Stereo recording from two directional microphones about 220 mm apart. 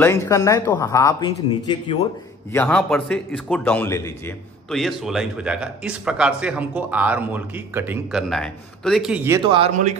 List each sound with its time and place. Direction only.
0.0 s a man's voice: 10° left (ahead or behind)
2.5 s a man's voice: 5° left (ahead or behind)
4.6 s speech: centre (ahead or behind)
9.4 s a man's voice: 25° right (ahead or behind)